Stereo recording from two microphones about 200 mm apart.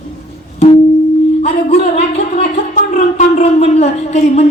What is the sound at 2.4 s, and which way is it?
Speech, 35° left (ahead or behind).